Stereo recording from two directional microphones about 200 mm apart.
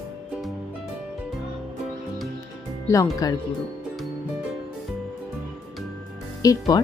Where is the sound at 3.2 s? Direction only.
20° left (ahead or behind).